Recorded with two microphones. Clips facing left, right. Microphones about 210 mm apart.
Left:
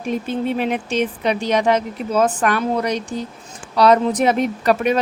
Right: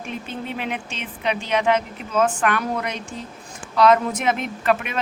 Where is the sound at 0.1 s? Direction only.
40° left (ahead or behind).